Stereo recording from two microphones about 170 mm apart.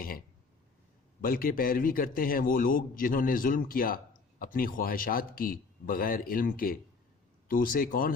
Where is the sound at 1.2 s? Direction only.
60° left (ahead or behind).